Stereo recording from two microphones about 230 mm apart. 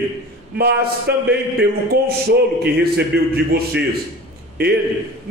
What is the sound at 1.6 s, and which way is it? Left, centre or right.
A man's voice, right.